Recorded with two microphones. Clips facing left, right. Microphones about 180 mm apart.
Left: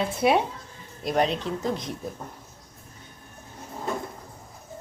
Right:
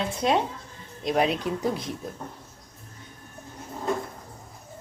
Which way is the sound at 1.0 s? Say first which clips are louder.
Even; 5° right (ahead or behind).